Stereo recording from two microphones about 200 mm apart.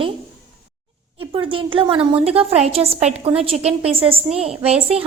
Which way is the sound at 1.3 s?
25° right (ahead or behind).